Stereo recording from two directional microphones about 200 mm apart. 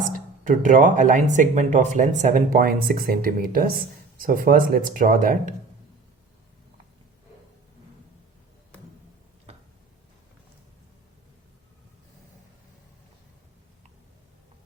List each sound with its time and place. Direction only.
0.1 s speech: 40° right (ahead or behind)